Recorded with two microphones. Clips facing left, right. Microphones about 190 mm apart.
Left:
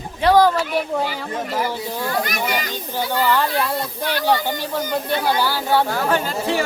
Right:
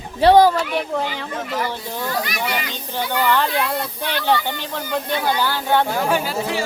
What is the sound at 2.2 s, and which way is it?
Speech, 45° left (ahead or behind).